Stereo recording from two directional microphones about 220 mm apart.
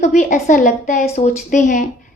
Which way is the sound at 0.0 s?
35° left (ahead or behind).